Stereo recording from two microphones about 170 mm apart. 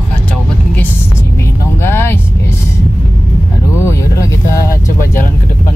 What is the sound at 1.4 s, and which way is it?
Speech, 15° left (ahead or behind).